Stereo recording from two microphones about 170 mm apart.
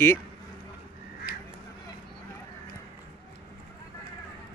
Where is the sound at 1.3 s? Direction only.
70° left (ahead or behind).